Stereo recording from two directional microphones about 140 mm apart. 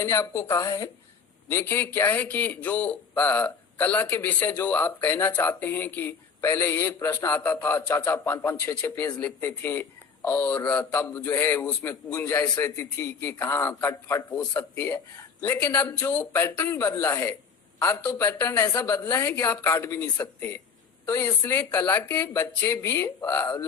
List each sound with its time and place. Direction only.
0.0 s a man's voice: 15° left (ahead or behind)